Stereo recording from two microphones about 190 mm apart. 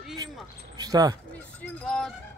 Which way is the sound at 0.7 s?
20° right (ahead or behind).